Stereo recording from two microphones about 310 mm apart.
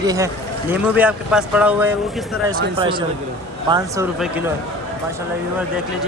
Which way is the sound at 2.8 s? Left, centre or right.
Centre.